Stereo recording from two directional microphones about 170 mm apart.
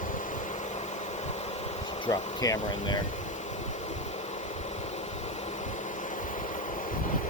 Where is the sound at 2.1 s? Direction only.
25° left (ahead or behind).